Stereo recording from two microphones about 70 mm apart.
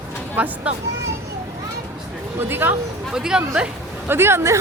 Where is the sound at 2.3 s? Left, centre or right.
Right.